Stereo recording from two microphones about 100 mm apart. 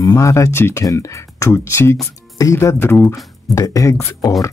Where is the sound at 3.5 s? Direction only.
35° left (ahead or behind).